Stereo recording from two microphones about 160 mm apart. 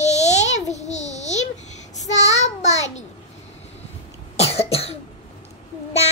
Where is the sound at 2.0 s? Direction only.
45° left (ahead or behind).